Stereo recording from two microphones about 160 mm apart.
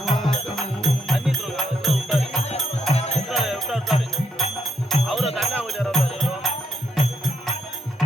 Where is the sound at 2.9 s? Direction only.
40° left (ahead or behind).